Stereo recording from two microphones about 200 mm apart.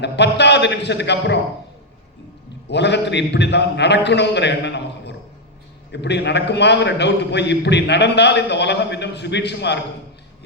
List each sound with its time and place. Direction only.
0.0 s a man's voice: 60° left (ahead or behind)
2.6 s a man's voice: 60° left (ahead or behind)